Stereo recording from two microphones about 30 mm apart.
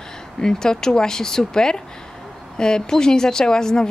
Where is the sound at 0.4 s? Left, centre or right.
Left.